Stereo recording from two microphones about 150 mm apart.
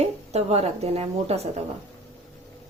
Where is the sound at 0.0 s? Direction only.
45° right (ahead or behind).